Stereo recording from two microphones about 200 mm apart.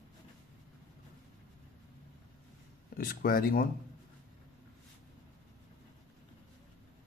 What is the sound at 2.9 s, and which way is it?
Speech, 45° left (ahead or behind).